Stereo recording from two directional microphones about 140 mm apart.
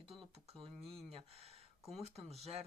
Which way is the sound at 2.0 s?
50° right (ahead or behind).